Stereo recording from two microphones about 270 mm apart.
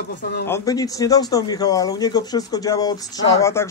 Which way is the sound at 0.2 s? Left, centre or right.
Left.